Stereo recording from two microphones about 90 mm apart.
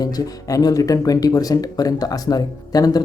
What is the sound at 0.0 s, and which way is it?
Speech, 40° left (ahead or behind).